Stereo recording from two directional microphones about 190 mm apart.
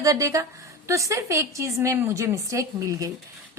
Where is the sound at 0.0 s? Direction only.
15° right (ahead or behind).